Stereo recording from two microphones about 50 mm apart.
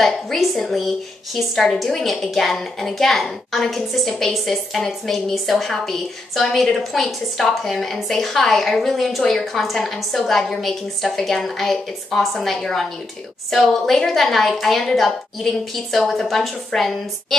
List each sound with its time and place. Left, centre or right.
0.0 s a woman's voice: centre